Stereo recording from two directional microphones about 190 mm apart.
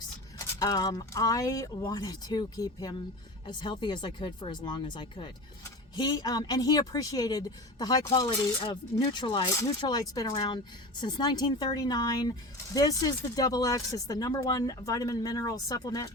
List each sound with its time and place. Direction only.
0.3 s speech: 20° left (ahead or behind)